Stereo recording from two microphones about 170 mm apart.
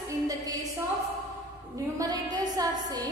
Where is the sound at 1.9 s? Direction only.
20° right (ahead or behind).